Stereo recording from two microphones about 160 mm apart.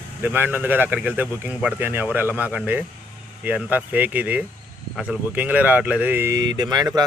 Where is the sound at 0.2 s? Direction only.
15° right (ahead or behind).